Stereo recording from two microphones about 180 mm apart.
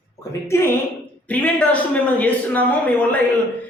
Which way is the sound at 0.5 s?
15° left (ahead or behind).